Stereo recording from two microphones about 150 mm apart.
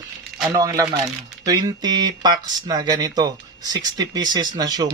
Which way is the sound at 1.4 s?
25° right (ahead or behind).